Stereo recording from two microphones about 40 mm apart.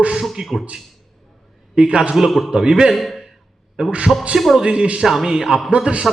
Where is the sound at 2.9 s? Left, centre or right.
Centre.